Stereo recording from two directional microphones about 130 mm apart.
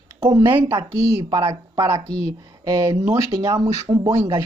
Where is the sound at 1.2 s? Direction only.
35° right (ahead or behind).